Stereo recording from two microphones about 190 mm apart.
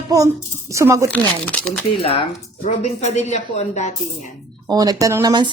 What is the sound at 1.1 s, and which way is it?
Speech, 5° left (ahead or behind).